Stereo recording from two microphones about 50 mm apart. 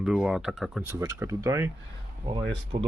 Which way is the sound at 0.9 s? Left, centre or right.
Right.